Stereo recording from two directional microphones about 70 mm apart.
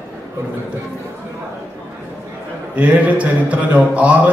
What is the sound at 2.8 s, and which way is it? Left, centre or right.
A man's voice, centre.